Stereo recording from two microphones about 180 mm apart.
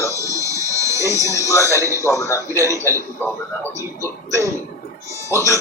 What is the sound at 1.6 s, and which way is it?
Speech, 15° right (ahead or behind).